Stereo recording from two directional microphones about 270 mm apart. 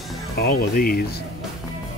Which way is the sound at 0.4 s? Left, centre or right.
Left.